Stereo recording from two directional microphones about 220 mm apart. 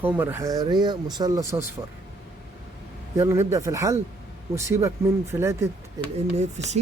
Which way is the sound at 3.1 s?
10° right (ahead or behind).